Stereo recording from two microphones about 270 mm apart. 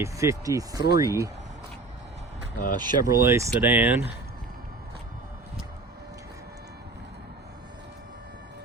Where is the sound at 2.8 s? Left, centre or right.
Centre.